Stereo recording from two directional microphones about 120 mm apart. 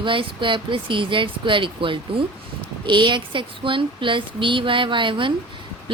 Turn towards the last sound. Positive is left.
turn(degrees=-45)  # may be behind; listen again after turning